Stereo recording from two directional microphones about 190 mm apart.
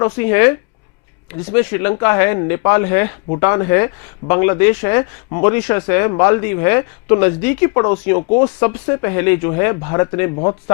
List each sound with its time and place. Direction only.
0.0 s speech: 15° left (ahead or behind)